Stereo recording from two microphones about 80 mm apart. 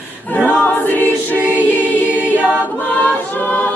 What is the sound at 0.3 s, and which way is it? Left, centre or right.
Choir, left.